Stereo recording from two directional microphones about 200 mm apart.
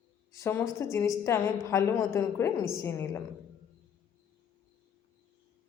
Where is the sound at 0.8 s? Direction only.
15° left (ahead or behind).